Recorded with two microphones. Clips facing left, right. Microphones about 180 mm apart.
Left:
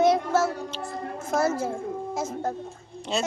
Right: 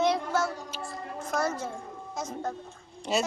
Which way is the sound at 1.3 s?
25° left (ahead or behind).